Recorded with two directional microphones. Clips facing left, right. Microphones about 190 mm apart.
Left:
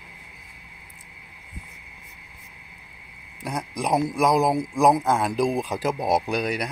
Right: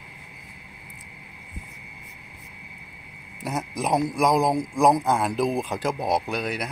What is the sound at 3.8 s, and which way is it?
A man's voice, centre (ahead or behind).